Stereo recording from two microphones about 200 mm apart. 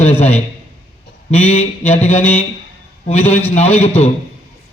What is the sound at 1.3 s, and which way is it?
A man's voice, 30° left (ahead or behind).